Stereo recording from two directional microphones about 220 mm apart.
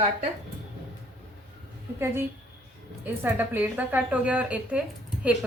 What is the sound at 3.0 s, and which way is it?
A woman's voice, 10° right (ahead or behind).